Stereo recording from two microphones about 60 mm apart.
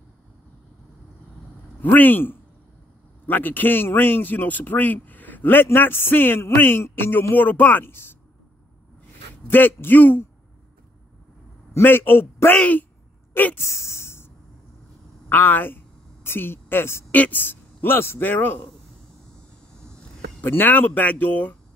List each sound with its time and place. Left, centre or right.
1.8 s a man's voice: left
9.5 s a man's voice: left
11.8 s a man's voice: left
12.5 s speech: left
13.6 s a sound: left
15.2 s a man's voice: left
17.1 s a man's voice: left
20.4 s speech: left